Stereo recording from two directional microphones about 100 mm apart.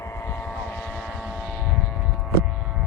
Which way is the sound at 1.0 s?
10° right (ahead or behind).